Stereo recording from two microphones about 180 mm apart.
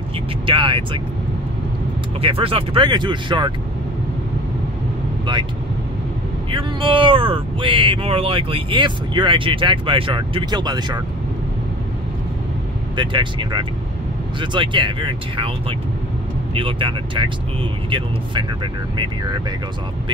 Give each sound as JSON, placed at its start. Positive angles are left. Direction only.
{"t": 0.5, "sound": "speech", "side_deg": -30}
{"t": 2.2, "sound": "speech", "side_deg": -30}
{"t": 6.5, "sound": "speech", "side_deg": -30}
{"t": 12.9, "sound": "speech", "side_deg": -25}
{"t": 16.5, "sound": "speech", "side_deg": -30}